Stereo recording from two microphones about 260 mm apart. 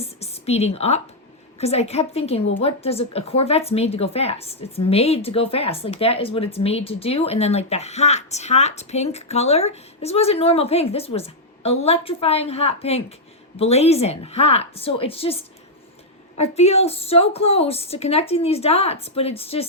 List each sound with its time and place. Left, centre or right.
0.0 s a woman's voice: left
16.4 s speech: left